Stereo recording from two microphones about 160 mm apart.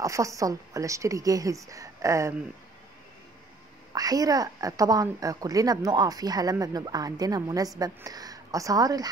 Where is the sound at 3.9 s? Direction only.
20° right (ahead or behind).